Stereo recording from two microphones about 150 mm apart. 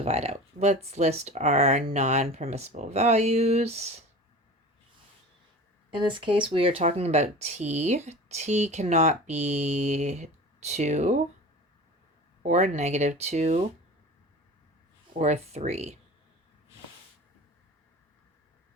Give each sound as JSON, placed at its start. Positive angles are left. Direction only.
{"t": 0.0, "sound": "speech", "side_deg": -45}
{"t": 5.9, "sound": "speech", "side_deg": -35}
{"t": 12.4, "sound": "speech", "side_deg": -55}
{"t": 15.1, "sound": "speech", "side_deg": -50}